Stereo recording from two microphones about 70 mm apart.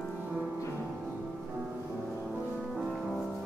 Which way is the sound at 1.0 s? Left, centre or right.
Centre.